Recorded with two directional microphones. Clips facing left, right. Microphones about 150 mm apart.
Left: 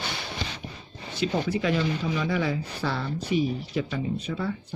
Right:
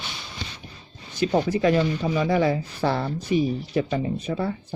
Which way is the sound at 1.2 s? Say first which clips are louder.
Right 5 dB; 45° right (ahead or behind).